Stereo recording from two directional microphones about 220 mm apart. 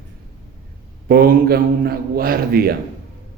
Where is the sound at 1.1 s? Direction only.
45° right (ahead or behind).